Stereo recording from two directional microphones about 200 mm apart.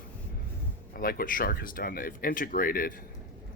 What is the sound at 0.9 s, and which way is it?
Speech, 45° left (ahead or behind).